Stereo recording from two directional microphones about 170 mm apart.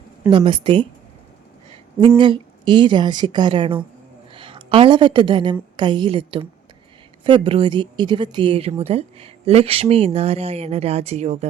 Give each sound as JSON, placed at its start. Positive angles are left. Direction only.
{"t": 0.3, "sound": "a woman's voice", "side_deg": -30}
{"t": 2.0, "sound": "a woman's voice", "side_deg": -30}